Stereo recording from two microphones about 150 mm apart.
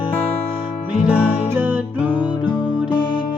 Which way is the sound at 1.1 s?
10° right (ahead or behind).